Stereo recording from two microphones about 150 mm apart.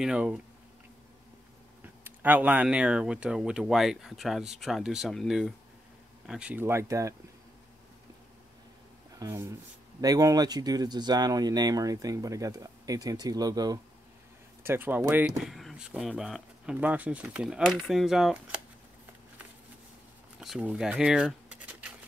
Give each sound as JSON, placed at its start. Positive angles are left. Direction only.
{"t": 0.0, "sound": "speech", "side_deg": -5}
{"t": 1.8, "sound": "speech", "side_deg": -10}
{"t": 9.2, "sound": "speech", "side_deg": -20}
{"t": 14.6, "sound": "speech", "side_deg": -15}
{"t": 15.4, "sound": "speech", "side_deg": 0}
{"t": 20.3, "sound": "a sound", "side_deg": -5}